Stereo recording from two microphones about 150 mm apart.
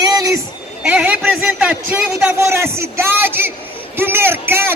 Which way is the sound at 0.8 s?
10° right (ahead or behind).